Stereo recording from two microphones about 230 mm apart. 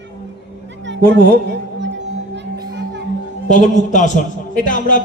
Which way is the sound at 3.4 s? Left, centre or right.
Left.